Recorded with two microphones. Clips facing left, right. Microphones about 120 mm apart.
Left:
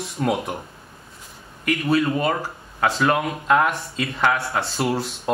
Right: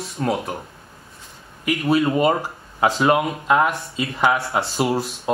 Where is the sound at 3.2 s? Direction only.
5° right (ahead or behind).